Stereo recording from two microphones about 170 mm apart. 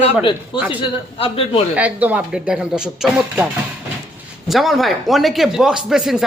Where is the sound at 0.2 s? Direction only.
30° left (ahead or behind).